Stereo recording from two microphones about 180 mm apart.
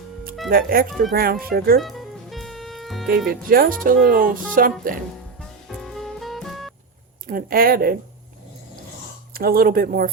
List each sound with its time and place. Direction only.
0.5 s speech: 55° right (ahead or behind)
1.8 s music: centre (ahead or behind)
3.2 s speech: 55° right (ahead or behind)
5.4 s music: centre (ahead or behind)
7.3 s speech: 55° right (ahead or behind)
9.3 s speech: 55° right (ahead or behind)